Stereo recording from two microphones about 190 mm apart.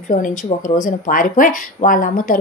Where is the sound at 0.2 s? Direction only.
45° left (ahead or behind).